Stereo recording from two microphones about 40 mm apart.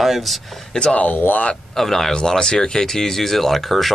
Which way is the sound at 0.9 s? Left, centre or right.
Left.